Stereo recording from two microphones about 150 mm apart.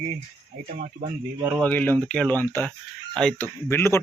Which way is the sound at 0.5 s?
65° right (ahead or behind).